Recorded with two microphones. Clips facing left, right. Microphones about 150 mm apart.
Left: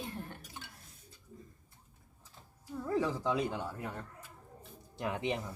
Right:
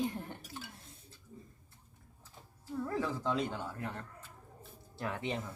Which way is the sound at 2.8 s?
10° left (ahead or behind).